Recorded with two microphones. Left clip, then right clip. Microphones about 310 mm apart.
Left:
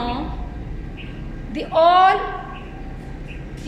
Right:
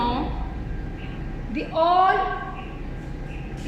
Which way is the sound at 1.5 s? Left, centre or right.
Left.